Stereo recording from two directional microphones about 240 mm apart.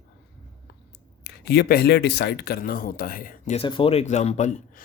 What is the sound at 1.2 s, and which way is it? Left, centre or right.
Speech, left.